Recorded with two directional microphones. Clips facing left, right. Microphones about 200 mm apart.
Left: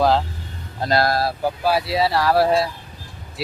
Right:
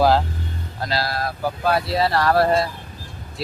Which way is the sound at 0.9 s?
50° left (ahead or behind).